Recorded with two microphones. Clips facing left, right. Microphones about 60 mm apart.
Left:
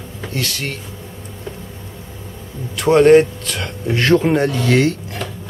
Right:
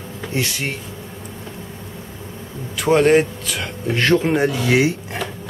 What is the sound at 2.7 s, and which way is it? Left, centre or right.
A man's voice, centre.